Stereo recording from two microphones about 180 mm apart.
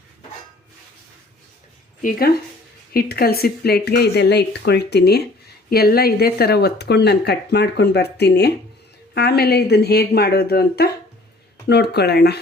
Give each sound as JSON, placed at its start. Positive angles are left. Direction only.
{"t": 2.0, "sound": "speech", "side_deg": 50}